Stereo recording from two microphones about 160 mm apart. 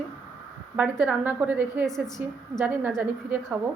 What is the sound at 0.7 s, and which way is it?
A woman's voice, 10° right (ahead or behind).